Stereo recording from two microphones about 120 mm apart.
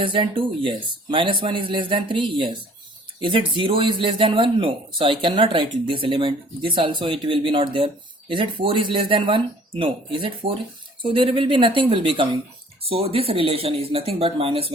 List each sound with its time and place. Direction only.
0.0 s speech: 45° right (ahead or behind)